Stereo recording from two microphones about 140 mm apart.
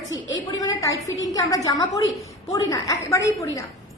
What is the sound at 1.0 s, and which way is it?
A woman's voice, 25° left (ahead or behind).